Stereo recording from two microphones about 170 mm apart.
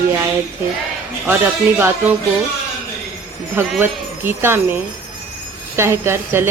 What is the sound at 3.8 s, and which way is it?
Speech, 10° right (ahead or behind).